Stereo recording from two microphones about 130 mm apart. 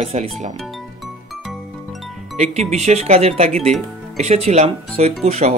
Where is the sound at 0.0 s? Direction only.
50° right (ahead or behind).